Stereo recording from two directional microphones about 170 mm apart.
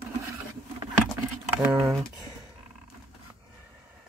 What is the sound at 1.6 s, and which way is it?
Speech, 5° right (ahead or behind).